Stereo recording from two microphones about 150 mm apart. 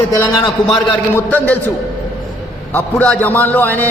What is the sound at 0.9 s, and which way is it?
Speech, 10° left (ahead or behind).